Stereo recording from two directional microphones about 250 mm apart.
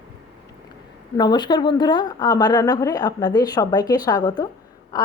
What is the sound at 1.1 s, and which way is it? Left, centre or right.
A woman's voice, centre.